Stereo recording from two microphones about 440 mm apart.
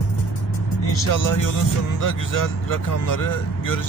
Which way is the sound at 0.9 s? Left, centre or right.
Left.